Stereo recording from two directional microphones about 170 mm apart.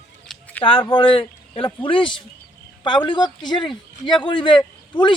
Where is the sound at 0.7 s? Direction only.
30° left (ahead or behind).